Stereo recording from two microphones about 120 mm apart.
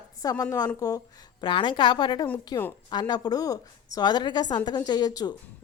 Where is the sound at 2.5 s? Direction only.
30° left (ahead or behind).